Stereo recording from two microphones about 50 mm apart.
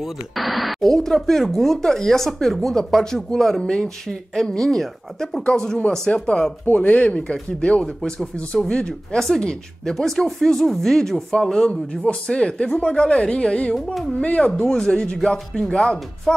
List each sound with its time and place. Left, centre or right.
0.0 s speech: centre
6.6 s speech: left
14.7 s speech: centre